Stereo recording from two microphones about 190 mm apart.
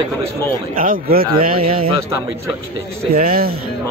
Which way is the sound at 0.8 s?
50° right (ahead or behind).